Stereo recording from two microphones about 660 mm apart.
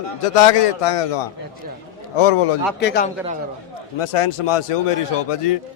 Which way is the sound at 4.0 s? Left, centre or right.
Left.